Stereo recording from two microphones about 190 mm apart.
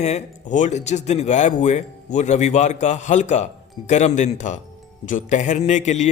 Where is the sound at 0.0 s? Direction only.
40° left (ahead or behind).